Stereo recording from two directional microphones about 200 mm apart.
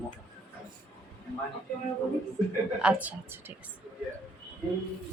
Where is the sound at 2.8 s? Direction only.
5° right (ahead or behind).